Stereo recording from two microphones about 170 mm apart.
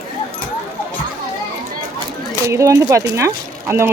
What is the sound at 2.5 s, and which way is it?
Speech, 20° right (ahead or behind).